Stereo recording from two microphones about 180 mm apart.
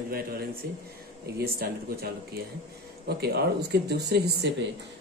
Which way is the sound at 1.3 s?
60° right (ahead or behind).